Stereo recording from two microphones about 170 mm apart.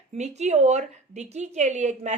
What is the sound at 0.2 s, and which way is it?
A woman's voice, 40° right (ahead or behind).